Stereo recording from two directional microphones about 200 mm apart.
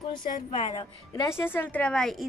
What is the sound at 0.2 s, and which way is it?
Speech, 40° left (ahead or behind).